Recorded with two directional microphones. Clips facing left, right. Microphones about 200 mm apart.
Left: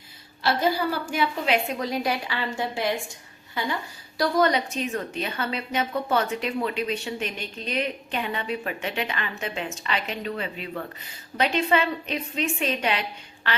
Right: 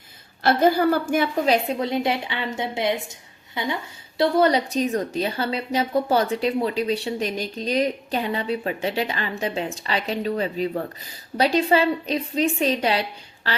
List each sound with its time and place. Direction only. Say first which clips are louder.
0.4 s a woman's voice: right 6 dB; 50° right (ahead or behind); by 3.8 s 20° right (ahead or behind)
4.2 s a woman's voice: right 3 dB; 30° right (ahead or behind)